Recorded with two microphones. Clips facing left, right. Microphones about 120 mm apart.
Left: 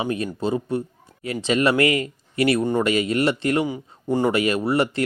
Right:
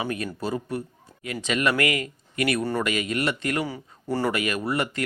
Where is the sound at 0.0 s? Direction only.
25° left (ahead or behind).